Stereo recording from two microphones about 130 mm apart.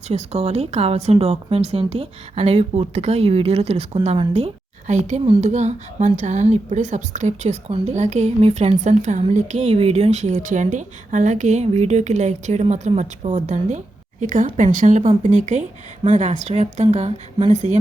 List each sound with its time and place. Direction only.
0.1 s speech: 55° right (ahead or behind)